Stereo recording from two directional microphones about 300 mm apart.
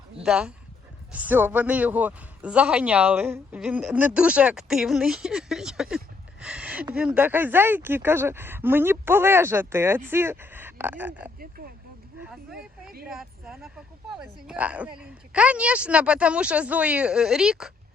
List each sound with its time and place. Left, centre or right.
0.2 s speech: centre
11.3 s a sound: right
13.1 s speech: centre